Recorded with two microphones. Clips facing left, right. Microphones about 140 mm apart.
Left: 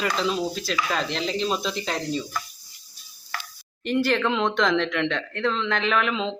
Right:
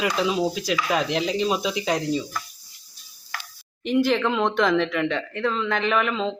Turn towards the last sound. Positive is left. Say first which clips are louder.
# right 1 dB
turn(degrees=-5)  # may be behind; listen again after turning